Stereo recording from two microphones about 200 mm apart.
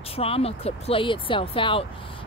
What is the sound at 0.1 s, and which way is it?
Speech, 30° left (ahead or behind).